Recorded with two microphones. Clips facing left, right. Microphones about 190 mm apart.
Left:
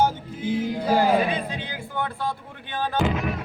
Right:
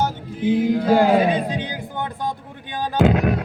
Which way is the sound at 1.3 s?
15° right (ahead or behind).